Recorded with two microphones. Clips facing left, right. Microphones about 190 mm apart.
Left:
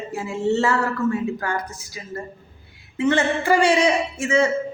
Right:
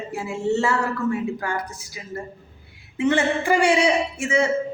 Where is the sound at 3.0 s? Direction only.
15° right (ahead or behind).